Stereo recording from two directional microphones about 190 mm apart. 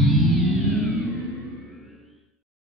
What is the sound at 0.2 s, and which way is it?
Music, centre (ahead or behind).